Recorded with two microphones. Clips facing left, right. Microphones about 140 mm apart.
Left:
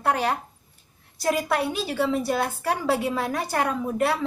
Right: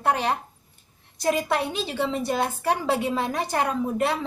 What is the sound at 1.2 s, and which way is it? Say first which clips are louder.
A woman's voice: even; 20° right (ahead or behind).